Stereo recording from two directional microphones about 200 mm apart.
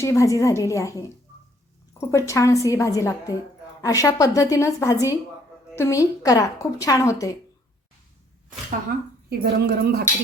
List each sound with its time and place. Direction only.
0.0 s speech: 15° left (ahead or behind)
9.3 s speech: 55° right (ahead or behind)